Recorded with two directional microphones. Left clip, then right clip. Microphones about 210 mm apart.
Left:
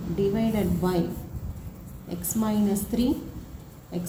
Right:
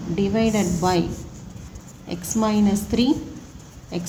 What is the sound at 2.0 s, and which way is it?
Speech, 45° right (ahead or behind).